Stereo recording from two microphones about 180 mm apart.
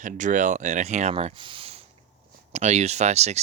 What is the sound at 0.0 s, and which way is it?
Speech, 45° right (ahead or behind).